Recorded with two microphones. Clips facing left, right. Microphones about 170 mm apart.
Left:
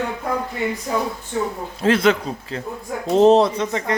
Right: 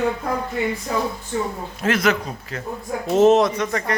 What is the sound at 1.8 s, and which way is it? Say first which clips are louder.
A man's voice: left 3 dB; 30° left (ahead or behind).